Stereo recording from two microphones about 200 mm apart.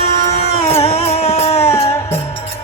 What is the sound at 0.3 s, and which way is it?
Music, 30° left (ahead or behind).